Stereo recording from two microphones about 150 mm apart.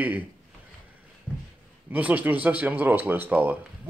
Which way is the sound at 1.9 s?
10° right (ahead or behind).